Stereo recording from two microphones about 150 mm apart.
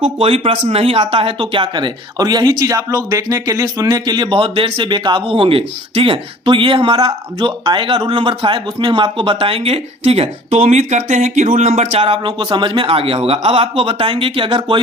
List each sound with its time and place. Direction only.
0.0 s speech: 40° right (ahead or behind)